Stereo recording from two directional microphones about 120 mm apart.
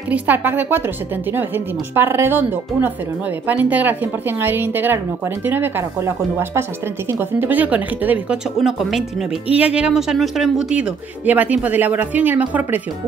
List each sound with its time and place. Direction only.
0.1 s speech: 15° right (ahead or behind)
8.5 s a woman's voice: centre (ahead or behind)